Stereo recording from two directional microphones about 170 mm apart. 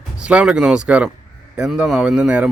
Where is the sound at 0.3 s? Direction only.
5° right (ahead or behind).